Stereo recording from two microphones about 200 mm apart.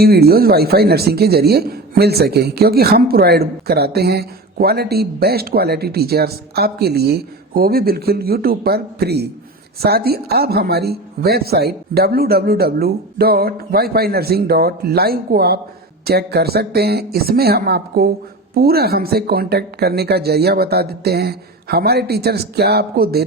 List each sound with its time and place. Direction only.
0.0 s speech: 50° right (ahead or behind)